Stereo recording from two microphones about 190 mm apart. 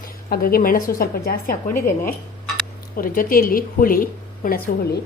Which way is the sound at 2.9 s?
50° left (ahead or behind).